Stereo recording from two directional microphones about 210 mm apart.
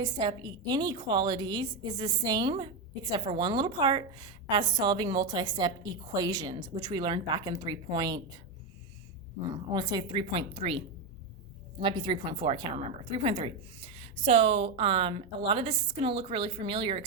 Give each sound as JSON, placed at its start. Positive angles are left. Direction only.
{"t": 0.0, "sound": "a woman's voice", "side_deg": -20}
{"t": 9.7, "sound": "a woman's voice", "side_deg": -20}
{"t": 11.8, "sound": "a woman's voice", "side_deg": -20}